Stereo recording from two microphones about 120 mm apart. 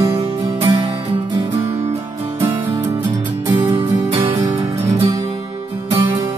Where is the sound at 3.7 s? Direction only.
50° right (ahead or behind).